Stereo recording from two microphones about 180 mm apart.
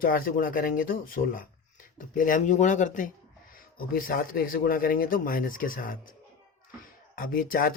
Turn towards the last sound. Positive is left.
turn(degrees=50)  # may be behind; listen again after turning